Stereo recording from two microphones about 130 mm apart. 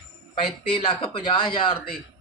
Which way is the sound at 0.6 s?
45° left (ahead or behind).